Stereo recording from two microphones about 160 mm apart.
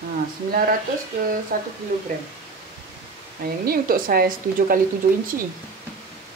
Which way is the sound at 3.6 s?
70° right (ahead or behind).